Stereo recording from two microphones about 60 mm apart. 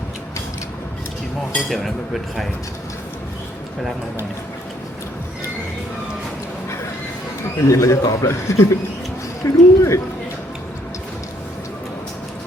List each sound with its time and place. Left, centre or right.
1.7 s speech: centre
7.5 s a man's voice: left